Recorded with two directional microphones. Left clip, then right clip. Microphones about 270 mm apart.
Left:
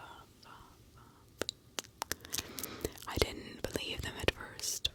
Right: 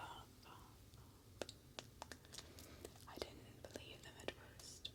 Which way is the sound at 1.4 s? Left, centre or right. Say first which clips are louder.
Left 12 dB; left.